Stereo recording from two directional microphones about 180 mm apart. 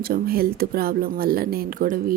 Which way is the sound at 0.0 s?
55° right (ahead or behind).